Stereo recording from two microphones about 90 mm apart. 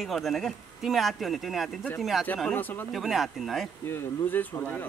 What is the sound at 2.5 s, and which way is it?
Speech, 20° left (ahead or behind).